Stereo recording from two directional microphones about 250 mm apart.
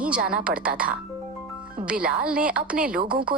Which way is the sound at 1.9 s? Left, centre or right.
Centre.